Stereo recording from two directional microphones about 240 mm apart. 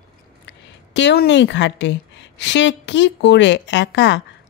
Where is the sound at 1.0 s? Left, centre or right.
Left.